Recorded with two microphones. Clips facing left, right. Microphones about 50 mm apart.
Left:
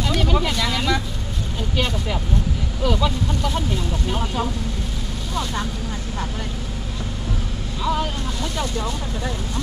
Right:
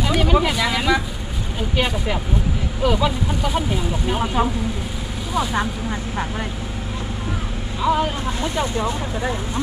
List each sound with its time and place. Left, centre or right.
0.0 s speech: centre
7.8 s speech: centre